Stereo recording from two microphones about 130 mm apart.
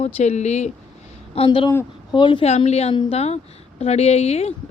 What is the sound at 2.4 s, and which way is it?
A woman's voice, 55° left (ahead or behind).